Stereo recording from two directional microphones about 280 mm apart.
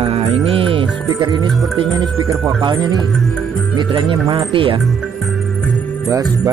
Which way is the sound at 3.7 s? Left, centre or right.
Centre.